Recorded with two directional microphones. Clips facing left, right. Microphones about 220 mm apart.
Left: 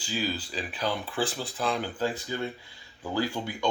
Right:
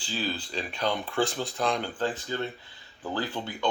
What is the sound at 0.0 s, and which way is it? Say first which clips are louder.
Speech: left 1 dB; 10° left (ahead or behind).